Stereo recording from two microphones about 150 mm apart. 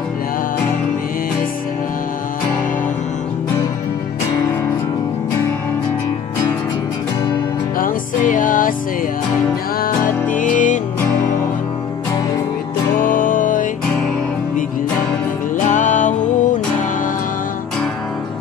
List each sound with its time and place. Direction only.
7.7 s music: 65° left (ahead or behind)
9.8 s music: 65° left (ahead or behind)
12.9 s music: 65° left (ahead or behind)
15.5 s music: 55° left (ahead or behind)